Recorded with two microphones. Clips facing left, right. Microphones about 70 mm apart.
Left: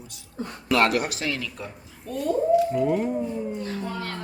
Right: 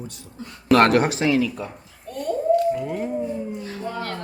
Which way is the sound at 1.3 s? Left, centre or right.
Centre.